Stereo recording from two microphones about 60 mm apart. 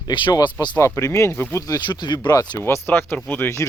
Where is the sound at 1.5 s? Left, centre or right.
Left.